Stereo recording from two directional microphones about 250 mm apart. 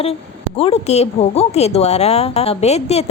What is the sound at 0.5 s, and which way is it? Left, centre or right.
A woman's voice, left.